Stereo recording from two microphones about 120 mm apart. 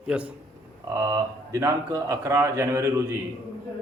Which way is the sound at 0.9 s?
25° right (ahead or behind).